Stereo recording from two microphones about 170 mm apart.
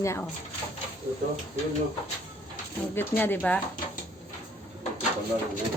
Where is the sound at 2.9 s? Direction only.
10° left (ahead or behind).